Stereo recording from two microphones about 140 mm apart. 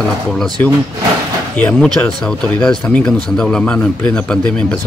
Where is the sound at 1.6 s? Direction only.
10° left (ahead or behind).